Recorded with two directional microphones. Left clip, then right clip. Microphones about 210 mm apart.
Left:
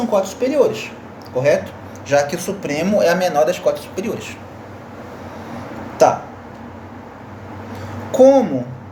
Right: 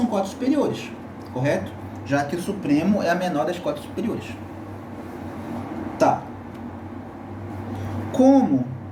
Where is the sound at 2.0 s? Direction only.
40° left (ahead or behind).